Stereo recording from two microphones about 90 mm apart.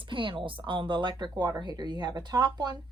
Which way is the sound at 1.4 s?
50° right (ahead or behind).